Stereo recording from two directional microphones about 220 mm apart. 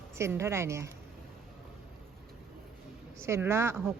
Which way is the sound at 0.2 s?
10° right (ahead or behind).